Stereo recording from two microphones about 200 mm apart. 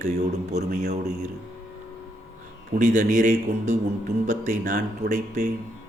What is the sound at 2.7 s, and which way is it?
Speech, 40° right (ahead or behind).